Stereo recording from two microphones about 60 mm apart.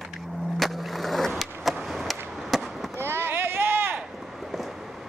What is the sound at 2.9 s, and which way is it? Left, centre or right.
Run, right.